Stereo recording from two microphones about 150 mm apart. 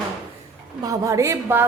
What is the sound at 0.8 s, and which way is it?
Speech, 20° right (ahead or behind).